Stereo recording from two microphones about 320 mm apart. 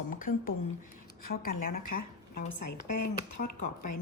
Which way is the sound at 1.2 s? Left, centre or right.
Left.